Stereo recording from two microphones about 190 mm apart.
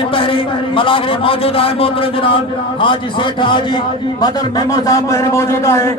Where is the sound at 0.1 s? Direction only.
25° left (ahead or behind).